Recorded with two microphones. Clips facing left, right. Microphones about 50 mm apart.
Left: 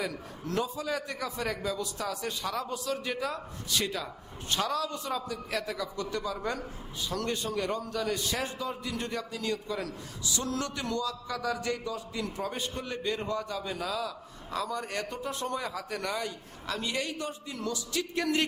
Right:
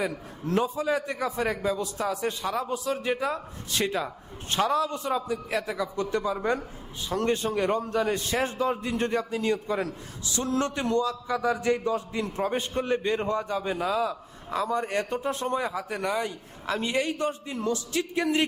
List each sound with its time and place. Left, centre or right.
0.0 s a man's voice: right
18.1 s music: centre